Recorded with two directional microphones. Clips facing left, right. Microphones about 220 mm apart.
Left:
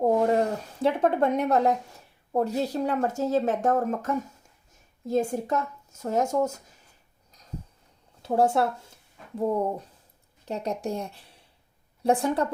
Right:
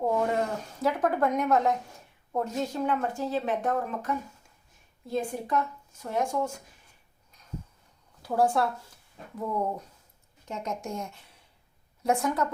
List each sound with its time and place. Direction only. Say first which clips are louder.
0.3 s speech: left 4 dB; 30° left (ahead or behind)
8.2 s speech: left 3 dB; 25° left (ahead or behind)